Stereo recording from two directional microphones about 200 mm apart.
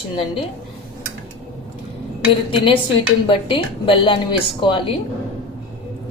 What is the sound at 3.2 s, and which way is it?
A woman's voice, 25° left (ahead or behind).